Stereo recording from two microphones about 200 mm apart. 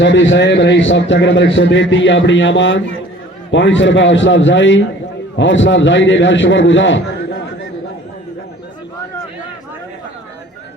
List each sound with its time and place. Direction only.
0.0 s a man's voice: 65° left (ahead or behind)